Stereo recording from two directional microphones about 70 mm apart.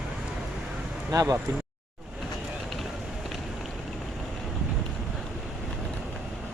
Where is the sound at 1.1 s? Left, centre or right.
Right.